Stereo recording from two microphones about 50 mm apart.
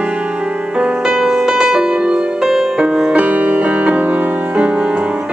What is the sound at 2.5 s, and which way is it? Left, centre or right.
Music, centre.